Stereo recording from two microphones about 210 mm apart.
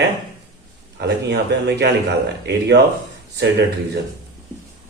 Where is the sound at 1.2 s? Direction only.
55° right (ahead or behind).